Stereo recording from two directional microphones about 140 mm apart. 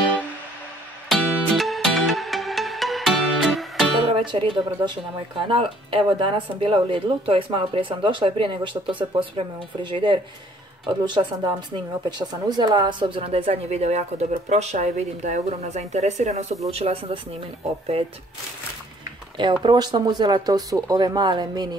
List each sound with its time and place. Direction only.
1.0 s music: centre (ahead or behind)
4.1 s speech: 35° right (ahead or behind)
19.6 s speech: 30° right (ahead or behind)